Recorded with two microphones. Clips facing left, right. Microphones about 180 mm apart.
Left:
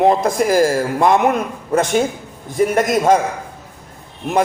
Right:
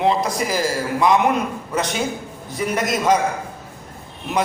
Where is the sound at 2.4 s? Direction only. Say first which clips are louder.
Left 7 dB; 50° left (ahead or behind).